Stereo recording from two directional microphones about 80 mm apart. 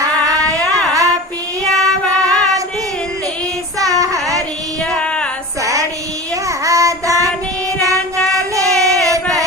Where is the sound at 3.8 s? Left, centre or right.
Right.